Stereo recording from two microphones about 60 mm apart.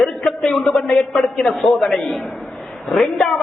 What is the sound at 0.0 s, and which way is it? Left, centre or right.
A man's voice, centre.